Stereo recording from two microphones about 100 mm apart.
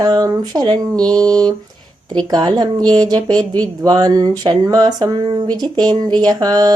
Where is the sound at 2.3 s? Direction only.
40° right (ahead or behind).